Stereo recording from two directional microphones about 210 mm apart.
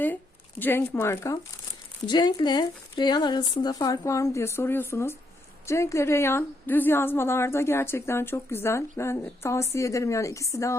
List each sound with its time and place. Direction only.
0.6 s a woman's voice: 10° left (ahead or behind)